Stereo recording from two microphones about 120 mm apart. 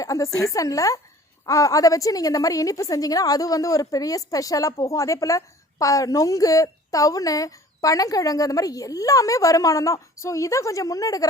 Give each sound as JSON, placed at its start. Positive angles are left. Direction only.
{"t": 0.0, "sound": "a woman's voice", "side_deg": 30}